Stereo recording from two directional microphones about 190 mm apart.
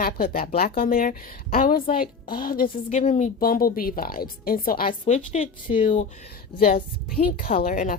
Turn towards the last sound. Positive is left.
turn(degrees=45)  # may be behind; listen again after turning